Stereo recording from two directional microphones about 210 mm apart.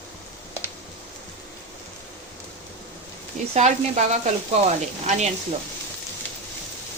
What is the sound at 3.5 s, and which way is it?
Speech, 35° right (ahead or behind).